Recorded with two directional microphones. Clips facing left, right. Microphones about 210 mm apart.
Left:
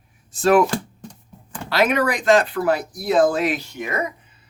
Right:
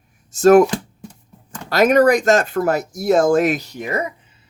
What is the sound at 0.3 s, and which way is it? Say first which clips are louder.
Speech: right 6 dB; 45° right (ahead or behind).